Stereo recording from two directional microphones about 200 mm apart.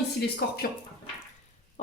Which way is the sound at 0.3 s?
50° left (ahead or behind).